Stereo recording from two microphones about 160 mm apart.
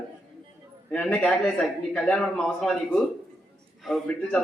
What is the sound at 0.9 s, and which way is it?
A man's voice, 10° left (ahead or behind).